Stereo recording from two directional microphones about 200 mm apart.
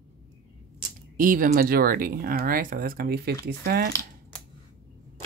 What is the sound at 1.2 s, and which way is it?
Speech, 45° right (ahead or behind).